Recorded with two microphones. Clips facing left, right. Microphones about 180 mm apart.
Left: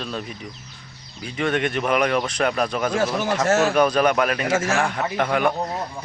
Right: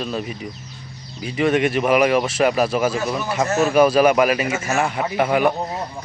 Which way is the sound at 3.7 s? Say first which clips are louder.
Right 4 dB; 5° right (ahead or behind).